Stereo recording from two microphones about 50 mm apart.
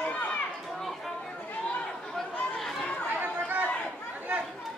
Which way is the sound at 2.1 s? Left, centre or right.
Centre.